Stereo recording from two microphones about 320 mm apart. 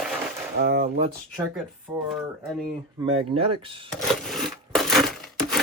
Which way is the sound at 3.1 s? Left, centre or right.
Centre.